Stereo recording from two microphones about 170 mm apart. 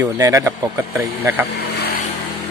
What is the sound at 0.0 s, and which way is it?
Speech, 15° right (ahead or behind).